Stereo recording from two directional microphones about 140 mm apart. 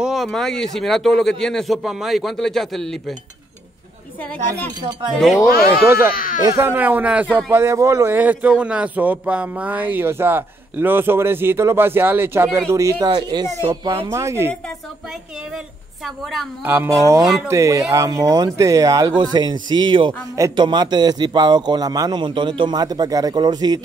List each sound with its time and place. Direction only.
0.0 s a man's voice: centre (ahead or behind)
4.6 s a man's voice: 10° left (ahead or behind)
5.9 s speech: 90° left
6.4 s speech: 20° right (ahead or behind)
14.0 s a man's voice: 20° right (ahead or behind)
16.6 s speech: 15° right (ahead or behind)
17.2 s a man's voice: centre (ahead or behind)
17.5 s a man's voice: 20° right (ahead or behind)